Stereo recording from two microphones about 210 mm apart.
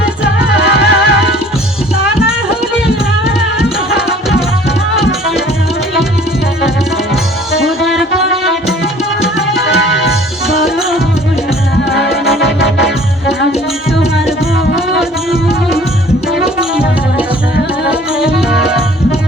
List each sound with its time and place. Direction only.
0.5 s music: 55° left (ahead or behind)
3.6 s tabla: 5° right (ahead or behind)
7.5 s music: centre (ahead or behind)
9.6 s music: 55° left (ahead or behind)
18.2 s music: 5° right (ahead or behind)